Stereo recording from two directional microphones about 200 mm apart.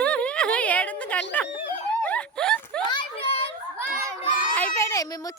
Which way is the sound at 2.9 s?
25° left (ahead or behind).